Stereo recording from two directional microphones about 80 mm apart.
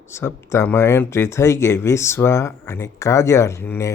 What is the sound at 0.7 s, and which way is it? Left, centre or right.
Speech, left.